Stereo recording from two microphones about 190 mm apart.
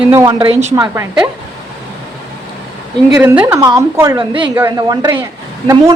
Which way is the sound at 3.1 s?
10° right (ahead or behind).